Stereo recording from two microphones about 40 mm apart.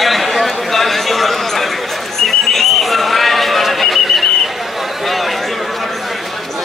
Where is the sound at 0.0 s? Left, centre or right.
Centre.